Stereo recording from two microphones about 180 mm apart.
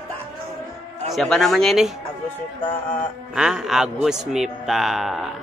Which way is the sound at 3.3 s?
Centre (ahead or behind).